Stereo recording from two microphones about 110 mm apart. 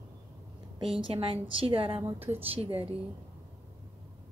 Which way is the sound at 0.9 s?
55° right (ahead or behind).